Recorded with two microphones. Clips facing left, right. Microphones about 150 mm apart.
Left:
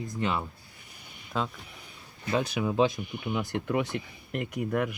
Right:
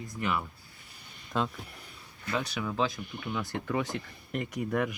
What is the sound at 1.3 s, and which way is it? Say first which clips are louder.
Speech: right 1 dB; centre (ahead or behind).